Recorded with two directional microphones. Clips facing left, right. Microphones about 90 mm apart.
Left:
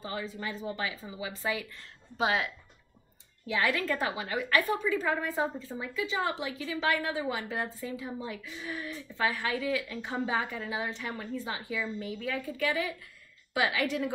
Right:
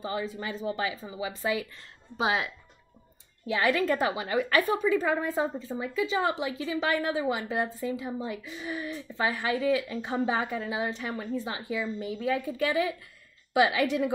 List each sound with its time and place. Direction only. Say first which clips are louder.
0.0 s a woman's voice: right 4 dB; 20° right (ahead or behind)
3.6 s a woman's voice: right 5 dB; 20° right (ahead or behind)